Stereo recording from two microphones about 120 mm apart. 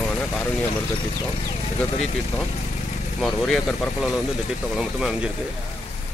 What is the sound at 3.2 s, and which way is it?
Speech, 5° left (ahead or behind).